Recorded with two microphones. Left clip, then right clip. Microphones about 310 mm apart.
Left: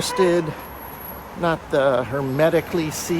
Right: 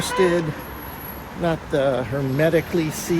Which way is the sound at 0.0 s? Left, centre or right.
Centre.